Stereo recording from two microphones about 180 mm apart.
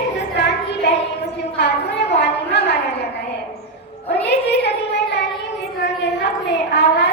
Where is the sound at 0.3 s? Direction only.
75° left (ahead or behind).